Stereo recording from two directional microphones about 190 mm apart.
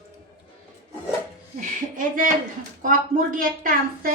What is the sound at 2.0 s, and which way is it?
A woman's voice, 45° right (ahead or behind).